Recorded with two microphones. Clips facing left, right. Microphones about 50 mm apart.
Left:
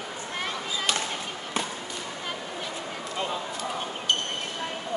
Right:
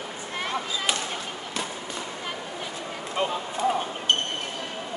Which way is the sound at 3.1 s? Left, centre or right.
Right.